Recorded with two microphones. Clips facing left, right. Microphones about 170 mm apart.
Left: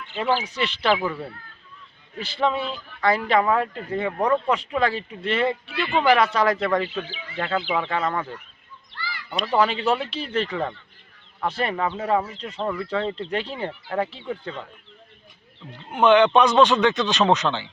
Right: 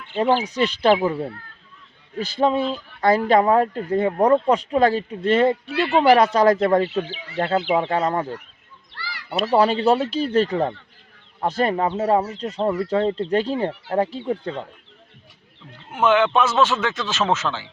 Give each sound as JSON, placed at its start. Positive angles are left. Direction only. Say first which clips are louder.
{"t": 0.4, "sound": "speech", "louder": "right 5 dB", "side_deg": -40}
{"t": 9.5, "sound": "speech", "louder": "right 4 dB", "side_deg": -40}
{"t": 15.9, "sound": "speech", "louder": "left 2 dB", "side_deg": -5}